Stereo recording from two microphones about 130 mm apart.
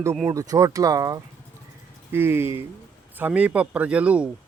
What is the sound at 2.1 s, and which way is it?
Speech, 15° right (ahead or behind).